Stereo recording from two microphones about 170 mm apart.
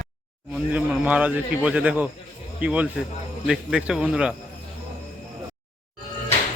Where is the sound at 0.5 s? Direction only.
10° right (ahead or behind).